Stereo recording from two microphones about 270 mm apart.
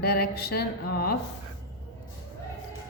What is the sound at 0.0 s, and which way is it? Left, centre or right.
A woman's voice, left.